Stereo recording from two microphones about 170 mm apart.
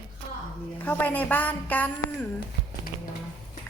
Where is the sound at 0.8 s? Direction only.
10° left (ahead or behind).